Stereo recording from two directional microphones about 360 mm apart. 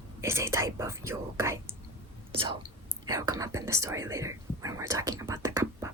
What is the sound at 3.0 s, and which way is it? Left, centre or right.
Whispering, centre.